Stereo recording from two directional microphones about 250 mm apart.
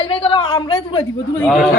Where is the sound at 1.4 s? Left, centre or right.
Centre.